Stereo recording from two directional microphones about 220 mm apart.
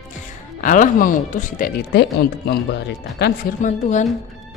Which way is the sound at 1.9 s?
45° left (ahead or behind).